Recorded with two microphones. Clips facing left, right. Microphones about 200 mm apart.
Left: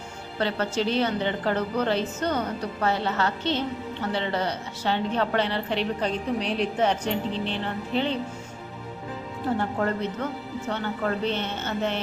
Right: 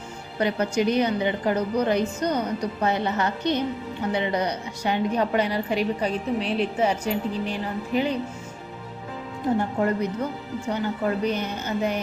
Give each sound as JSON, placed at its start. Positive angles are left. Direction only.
{"t": 0.3, "sound": "a woman's voice", "side_deg": -15}
{"t": 9.6, "sound": "a woman's voice", "side_deg": -15}